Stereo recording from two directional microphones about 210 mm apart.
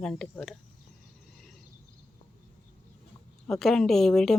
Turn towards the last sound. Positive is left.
turn(degrees=0)  # may be behind; listen again after turning